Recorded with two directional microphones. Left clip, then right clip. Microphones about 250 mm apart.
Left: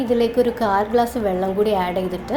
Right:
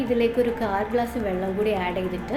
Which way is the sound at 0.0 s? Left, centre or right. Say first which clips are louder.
Left 4 dB; centre.